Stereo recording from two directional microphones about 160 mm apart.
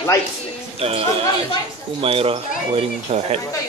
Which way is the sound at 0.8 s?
35° right (ahead or behind).